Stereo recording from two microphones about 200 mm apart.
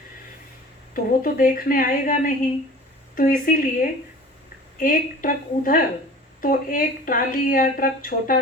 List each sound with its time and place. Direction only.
0.9 s speech: 45° left (ahead or behind)